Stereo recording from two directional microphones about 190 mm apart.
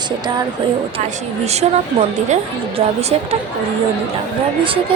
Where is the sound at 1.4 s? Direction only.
35° right (ahead or behind).